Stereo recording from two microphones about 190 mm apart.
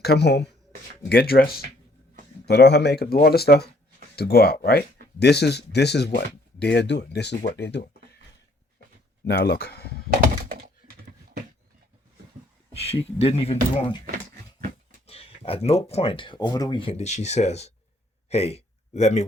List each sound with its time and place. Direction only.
0.0 s speech: 60° left (ahead or behind)
2.5 s speech: 65° left (ahead or behind)
9.2 s speech: 55° left (ahead or behind)
12.7 s speech: 30° left (ahead or behind)
15.0 s speech: 30° left (ahead or behind)